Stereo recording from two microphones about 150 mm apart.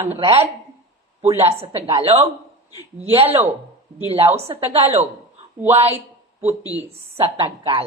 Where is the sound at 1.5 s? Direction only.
40° right (ahead or behind).